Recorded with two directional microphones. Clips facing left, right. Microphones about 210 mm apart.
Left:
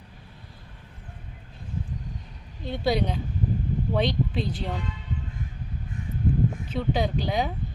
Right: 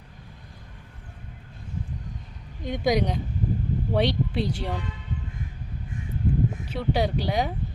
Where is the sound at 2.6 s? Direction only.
15° right (ahead or behind).